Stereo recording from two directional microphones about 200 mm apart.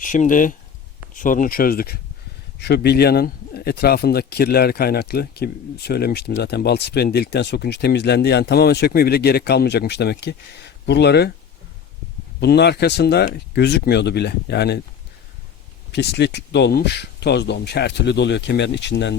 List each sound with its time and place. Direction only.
0.0 s speech: 40° left (ahead or behind); by 11.3 s 55° left (ahead or behind)
12.4 s speech: 55° left (ahead or behind)
15.9 s speech: 60° left (ahead or behind)